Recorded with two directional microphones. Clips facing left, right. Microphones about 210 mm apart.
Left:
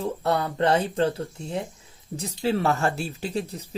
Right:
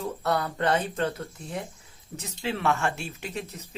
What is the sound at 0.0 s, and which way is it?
Speech, 30° left (ahead or behind).